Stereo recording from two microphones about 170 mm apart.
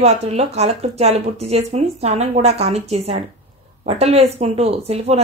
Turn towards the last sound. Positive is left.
turn(degrees=-40)  # may be behind; listen again after turning